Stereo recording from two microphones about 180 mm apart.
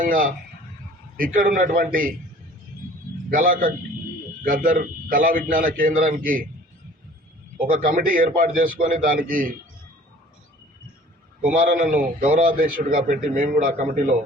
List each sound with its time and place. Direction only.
0.0 s a man's voice: 50° right (ahead or behind)
3.3 s a man's voice: 50° right (ahead or behind)
7.7 s a man's voice: 50° right (ahead or behind)
11.5 s a man's voice: 50° right (ahead or behind)